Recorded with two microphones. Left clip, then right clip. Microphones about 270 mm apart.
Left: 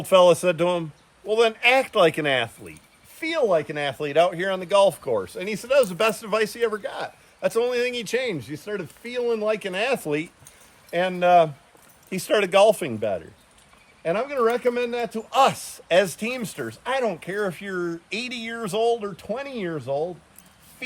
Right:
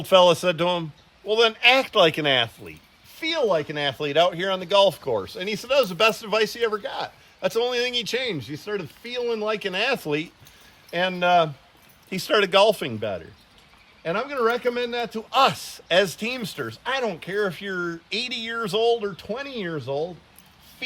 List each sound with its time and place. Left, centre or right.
0.1 s speech: centre
12.8 s speech: centre